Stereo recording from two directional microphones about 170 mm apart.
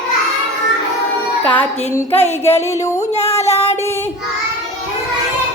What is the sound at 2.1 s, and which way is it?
Music, 35° left (ahead or behind).